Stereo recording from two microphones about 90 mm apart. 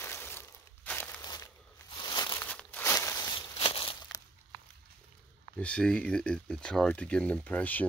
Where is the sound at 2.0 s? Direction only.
55° left (ahead or behind).